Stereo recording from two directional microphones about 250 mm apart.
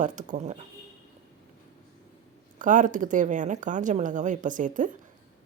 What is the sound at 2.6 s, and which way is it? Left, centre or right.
Speech, right.